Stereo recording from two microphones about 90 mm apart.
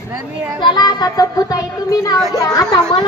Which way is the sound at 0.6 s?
55° left (ahead or behind).